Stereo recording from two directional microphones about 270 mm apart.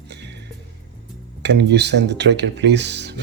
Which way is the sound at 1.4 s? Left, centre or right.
Right.